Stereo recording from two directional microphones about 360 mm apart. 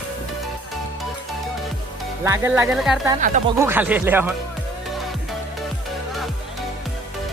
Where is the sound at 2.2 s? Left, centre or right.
Centre.